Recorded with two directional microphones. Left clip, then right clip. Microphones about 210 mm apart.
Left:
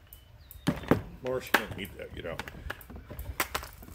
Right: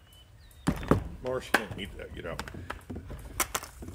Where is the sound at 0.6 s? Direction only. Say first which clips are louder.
Even; 5° right (ahead or behind).